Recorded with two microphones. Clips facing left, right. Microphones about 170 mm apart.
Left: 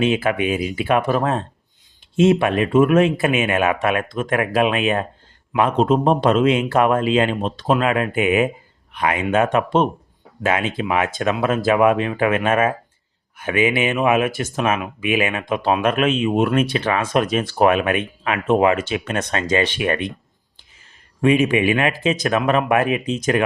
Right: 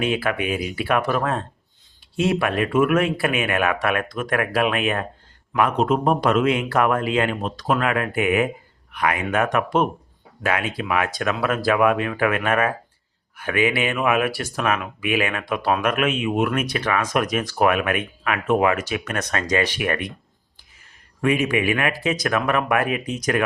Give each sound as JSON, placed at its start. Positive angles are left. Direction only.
{"t": 0.0, "sound": "speech", "side_deg": 20}
{"t": 21.2, "sound": "speech", "side_deg": 25}